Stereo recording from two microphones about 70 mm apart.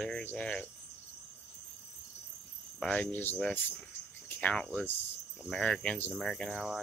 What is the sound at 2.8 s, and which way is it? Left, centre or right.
Speech, centre.